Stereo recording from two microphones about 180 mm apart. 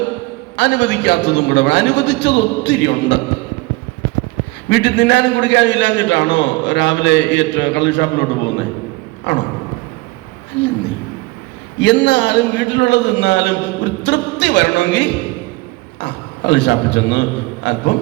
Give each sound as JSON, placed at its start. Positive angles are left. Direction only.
{"t": 0.5, "sound": "a man's voice", "side_deg": 75}
{"t": 4.7, "sound": "a man's voice", "side_deg": 75}
{"t": 11.8, "sound": "a man's voice", "side_deg": 80}